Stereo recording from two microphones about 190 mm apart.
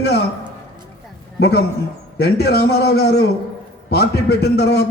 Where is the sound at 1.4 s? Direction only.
60° left (ahead or behind).